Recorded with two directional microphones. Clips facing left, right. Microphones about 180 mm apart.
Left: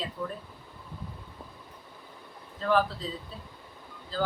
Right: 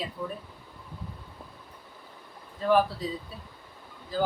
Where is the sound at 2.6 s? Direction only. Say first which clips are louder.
Right 3 dB; 15° right (ahead or behind).